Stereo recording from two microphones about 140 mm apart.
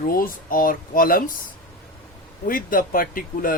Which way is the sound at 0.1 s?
90° left.